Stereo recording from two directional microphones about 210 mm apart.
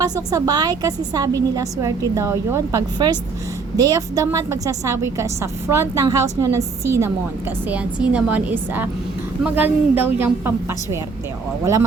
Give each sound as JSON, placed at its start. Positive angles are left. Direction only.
{"t": 0.0, "sound": "a woman's voice", "side_deg": -15}